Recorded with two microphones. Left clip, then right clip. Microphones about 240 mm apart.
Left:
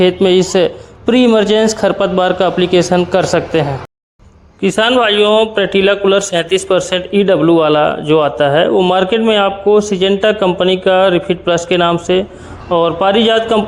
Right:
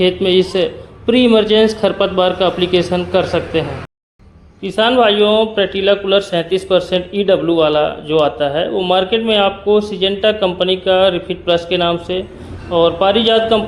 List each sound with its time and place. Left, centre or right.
0.0 s a man's voice: left